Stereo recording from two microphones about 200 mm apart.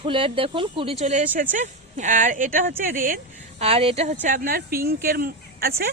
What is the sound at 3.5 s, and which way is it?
Speech, 30° right (ahead or behind).